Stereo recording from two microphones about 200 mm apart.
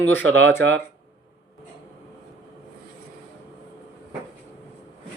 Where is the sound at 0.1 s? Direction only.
70° right (ahead or behind).